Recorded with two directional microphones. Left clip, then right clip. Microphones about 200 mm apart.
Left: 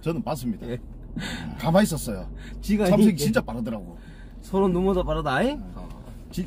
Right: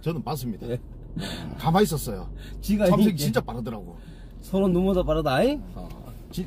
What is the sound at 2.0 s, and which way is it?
Speech, 20° left (ahead or behind).